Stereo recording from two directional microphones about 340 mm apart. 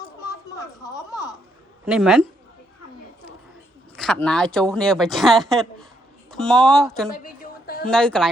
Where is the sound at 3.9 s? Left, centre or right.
Centre.